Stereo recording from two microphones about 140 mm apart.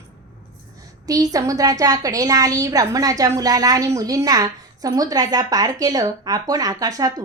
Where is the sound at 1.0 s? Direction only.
25° right (ahead or behind).